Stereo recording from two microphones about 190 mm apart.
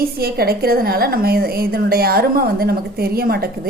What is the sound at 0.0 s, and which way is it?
A woman's voice, 55° right (ahead or behind).